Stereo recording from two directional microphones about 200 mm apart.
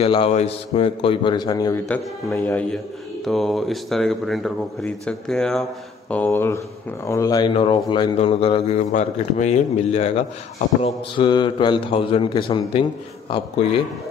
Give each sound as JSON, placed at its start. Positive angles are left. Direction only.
{"t": 0.0, "sound": "speech", "side_deg": 30}